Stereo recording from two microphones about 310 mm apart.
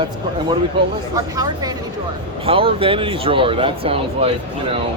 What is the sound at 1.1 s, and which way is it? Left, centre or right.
A woman's voice, centre.